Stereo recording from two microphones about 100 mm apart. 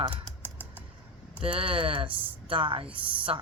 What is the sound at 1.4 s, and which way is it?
Speech, 65° right (ahead or behind).